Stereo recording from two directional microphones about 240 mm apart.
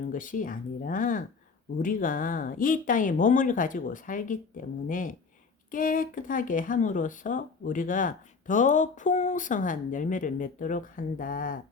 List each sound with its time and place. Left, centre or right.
0.1 s speech: left